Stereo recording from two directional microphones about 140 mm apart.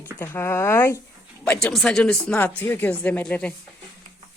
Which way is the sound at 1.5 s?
5° left (ahead or behind).